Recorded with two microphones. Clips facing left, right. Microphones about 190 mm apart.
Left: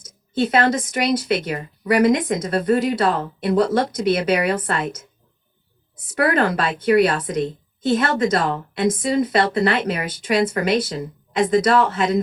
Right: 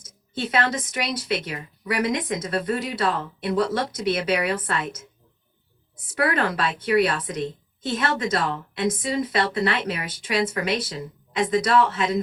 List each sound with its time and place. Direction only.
0.3 s a woman's voice: 45° left (ahead or behind)
6.1 s a woman's voice: 45° left (ahead or behind)